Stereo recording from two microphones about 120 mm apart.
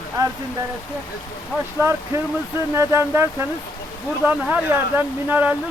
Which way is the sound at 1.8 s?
25° right (ahead or behind).